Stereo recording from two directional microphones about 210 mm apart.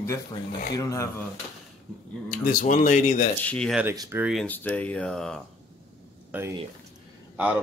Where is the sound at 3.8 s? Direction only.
15° right (ahead or behind).